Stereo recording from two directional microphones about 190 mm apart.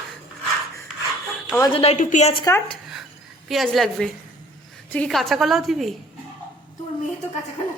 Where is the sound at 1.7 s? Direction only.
35° left (ahead or behind).